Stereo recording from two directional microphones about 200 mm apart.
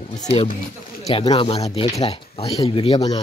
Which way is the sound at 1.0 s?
30° left (ahead or behind).